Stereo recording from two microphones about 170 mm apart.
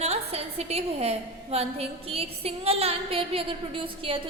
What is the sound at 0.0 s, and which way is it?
A woman's voice, 40° right (ahead or behind).